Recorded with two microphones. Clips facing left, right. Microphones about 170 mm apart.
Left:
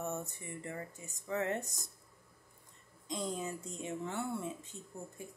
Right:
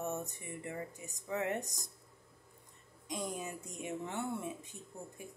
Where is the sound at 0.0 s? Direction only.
15° right (ahead or behind).